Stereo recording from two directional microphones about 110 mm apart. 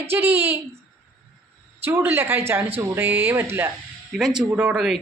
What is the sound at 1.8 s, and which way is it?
Speech, 20° right (ahead or behind).